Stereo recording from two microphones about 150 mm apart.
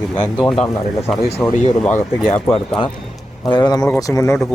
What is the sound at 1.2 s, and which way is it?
Speech, 45° left (ahead or behind).